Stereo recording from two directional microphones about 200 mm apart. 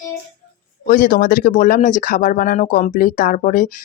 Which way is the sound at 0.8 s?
45° left (ahead or behind).